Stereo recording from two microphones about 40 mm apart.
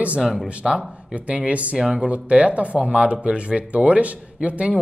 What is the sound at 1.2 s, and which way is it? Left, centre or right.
Speech, right.